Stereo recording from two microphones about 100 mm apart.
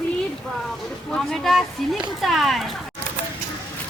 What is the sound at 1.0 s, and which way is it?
Speech, 5° left (ahead or behind).